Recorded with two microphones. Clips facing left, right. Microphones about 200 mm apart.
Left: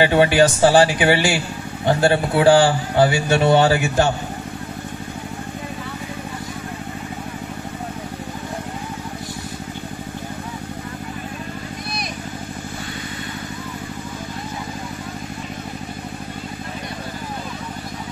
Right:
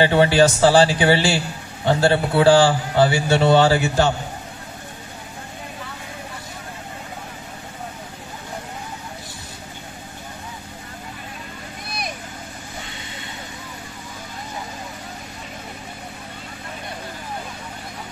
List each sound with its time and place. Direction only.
0.0 s a man's voice: 15° left (ahead or behind)